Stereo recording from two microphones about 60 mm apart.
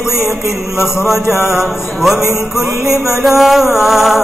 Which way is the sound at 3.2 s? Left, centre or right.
Centre.